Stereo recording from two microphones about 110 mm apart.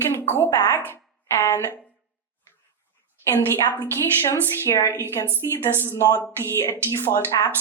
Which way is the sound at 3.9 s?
20° left (ahead or behind).